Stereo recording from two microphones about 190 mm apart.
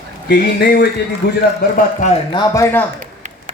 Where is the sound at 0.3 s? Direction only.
60° left (ahead or behind).